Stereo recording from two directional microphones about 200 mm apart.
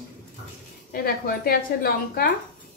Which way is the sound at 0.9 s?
50° left (ahead or behind).